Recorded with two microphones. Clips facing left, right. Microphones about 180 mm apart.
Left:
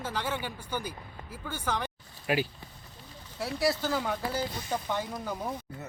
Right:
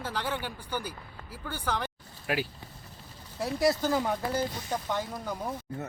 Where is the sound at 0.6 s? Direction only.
10° right (ahead or behind).